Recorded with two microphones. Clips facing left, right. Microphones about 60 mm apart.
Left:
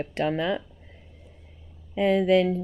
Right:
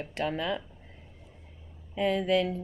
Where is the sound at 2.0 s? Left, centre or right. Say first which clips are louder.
Left 6 dB; left.